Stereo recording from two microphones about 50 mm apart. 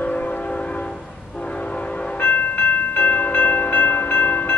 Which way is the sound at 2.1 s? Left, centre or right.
Left.